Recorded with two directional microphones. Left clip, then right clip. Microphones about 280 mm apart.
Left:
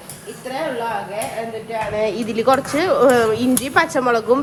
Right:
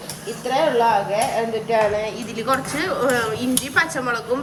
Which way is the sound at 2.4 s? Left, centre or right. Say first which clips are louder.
Left 5 dB; centre.